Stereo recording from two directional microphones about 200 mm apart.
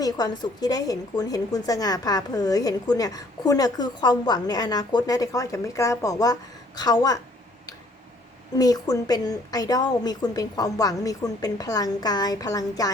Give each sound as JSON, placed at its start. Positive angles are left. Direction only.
{"t": 0.0, "sound": "a woman's voice", "side_deg": 20}
{"t": 8.5, "sound": "a woman's voice", "side_deg": 20}